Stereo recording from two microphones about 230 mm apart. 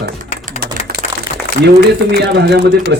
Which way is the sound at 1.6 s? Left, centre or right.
Right.